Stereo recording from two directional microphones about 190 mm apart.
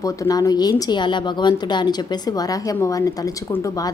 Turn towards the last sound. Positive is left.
turn(degrees=15)  # may be behind; listen again after turning